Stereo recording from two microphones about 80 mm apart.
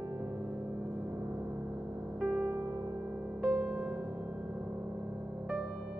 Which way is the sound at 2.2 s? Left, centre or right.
Centre.